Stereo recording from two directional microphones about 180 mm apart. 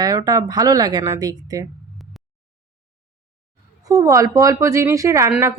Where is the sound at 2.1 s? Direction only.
Centre (ahead or behind).